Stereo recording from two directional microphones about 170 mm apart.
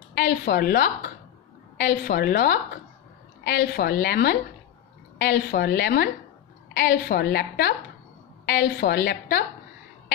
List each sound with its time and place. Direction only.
0.1 s a woman's voice: 80° left